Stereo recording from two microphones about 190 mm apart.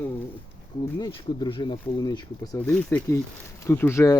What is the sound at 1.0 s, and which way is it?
Speech, 25° left (ahead or behind).